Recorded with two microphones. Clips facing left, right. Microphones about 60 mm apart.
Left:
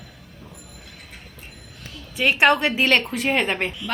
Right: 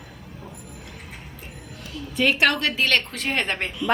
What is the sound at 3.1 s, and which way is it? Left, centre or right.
Speech, centre.